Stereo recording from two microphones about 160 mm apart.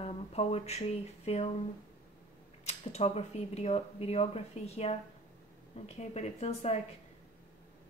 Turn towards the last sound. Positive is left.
turn(degrees=45)  # may be behind; listen again after turning